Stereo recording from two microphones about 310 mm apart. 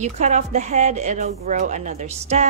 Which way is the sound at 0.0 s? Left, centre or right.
Right.